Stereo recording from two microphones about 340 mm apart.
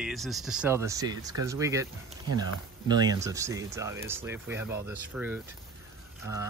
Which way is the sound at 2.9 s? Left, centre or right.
Centre.